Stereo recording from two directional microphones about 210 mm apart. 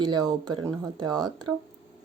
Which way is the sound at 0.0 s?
20° right (ahead or behind).